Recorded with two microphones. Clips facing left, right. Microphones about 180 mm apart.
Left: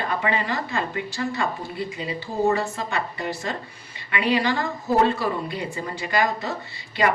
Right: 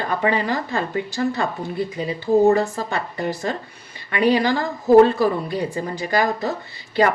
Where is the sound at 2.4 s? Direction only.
35° right (ahead or behind).